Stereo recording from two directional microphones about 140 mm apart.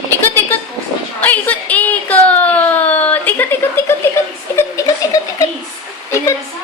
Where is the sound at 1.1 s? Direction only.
10° left (ahead or behind).